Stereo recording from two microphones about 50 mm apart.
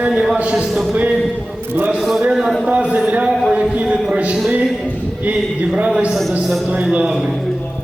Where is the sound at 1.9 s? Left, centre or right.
Centre.